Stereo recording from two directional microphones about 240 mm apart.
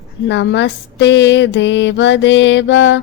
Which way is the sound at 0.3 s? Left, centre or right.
Left.